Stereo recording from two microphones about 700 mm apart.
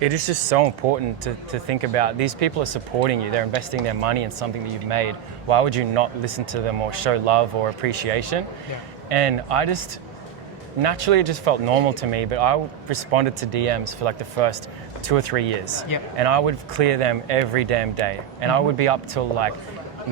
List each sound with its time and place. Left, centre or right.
0.0 s speech: right
10.8 s speech: right